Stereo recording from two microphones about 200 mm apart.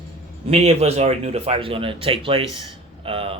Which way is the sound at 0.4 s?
30° right (ahead or behind).